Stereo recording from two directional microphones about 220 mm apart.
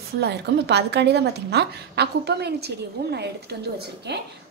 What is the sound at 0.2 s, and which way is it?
A woman's voice, 50° right (ahead or behind).